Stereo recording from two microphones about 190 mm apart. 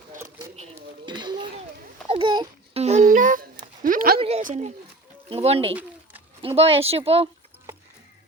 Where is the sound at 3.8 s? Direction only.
45° right (ahead or behind).